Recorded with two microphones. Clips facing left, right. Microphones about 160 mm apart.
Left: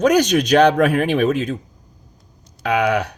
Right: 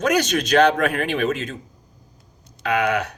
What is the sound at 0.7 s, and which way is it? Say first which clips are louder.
Speech: left 6 dB; 50° left (ahead or behind).